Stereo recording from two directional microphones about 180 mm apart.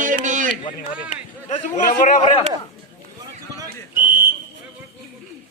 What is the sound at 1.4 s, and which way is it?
Chatter, 40° left (ahead or behind).